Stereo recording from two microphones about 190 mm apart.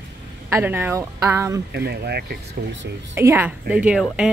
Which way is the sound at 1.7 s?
60° right (ahead or behind).